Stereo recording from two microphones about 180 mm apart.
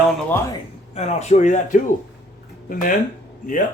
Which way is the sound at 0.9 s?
35° left (ahead or behind).